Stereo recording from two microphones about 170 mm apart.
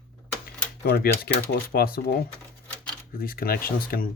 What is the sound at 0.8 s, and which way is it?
Speech, 65° left (ahead or behind).